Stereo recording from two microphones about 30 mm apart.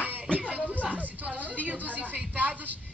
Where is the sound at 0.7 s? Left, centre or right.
Right.